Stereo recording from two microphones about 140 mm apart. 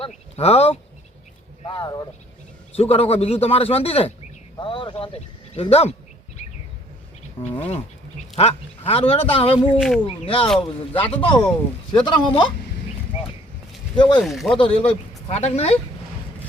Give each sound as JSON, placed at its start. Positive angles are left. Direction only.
{"t": 0.3, "sound": "a man's voice", "side_deg": 45}
{"t": 1.6, "sound": "speech", "side_deg": 35}
{"t": 2.7, "sound": "a man's voice", "side_deg": 45}
{"t": 7.5, "sound": "a man's voice", "side_deg": 40}
{"t": 9.7, "sound": "speech", "side_deg": 0}
{"t": 10.1, "sound": "speech", "side_deg": 40}
{"t": 13.9, "sound": "speech", "side_deg": 35}
{"t": 14.2, "sound": "speech", "side_deg": 0}
{"t": 14.6, "sound": "a man's voice", "side_deg": 45}